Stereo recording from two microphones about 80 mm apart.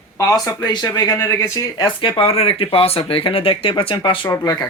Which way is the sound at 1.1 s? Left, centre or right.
Left.